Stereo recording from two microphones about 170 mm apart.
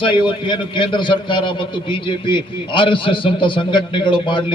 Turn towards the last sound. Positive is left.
turn(degrees=30)  # may be behind; listen again after turning